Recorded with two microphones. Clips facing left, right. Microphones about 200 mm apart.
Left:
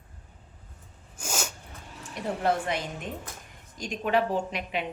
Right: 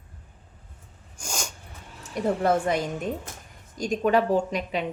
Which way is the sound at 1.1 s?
5° left (ahead or behind).